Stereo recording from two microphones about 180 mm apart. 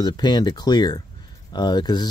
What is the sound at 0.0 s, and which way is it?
Speech, 25° left (ahead or behind).